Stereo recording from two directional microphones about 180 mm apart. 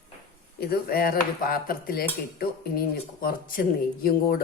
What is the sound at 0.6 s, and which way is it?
Speech, 55° left (ahead or behind).